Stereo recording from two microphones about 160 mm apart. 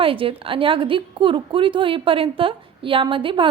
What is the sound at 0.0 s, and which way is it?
A woman's voice, 35° right (ahead or behind).